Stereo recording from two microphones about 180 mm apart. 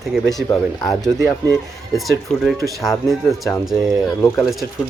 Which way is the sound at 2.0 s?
Centre (ahead or behind).